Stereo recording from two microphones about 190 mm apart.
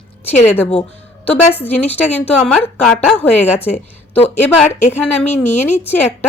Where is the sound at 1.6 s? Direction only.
10° left (ahead or behind).